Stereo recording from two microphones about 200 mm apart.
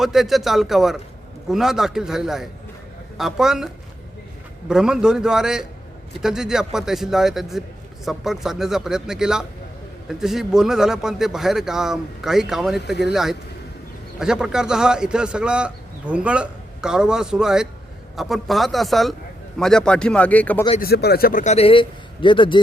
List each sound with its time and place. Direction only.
0.0 s a man's voice: centre (ahead or behind)
4.7 s a man's voice: 5° right (ahead or behind)
20.7 s a man's voice: 50° left (ahead or behind); by 22.6 s 25° left (ahead or behind)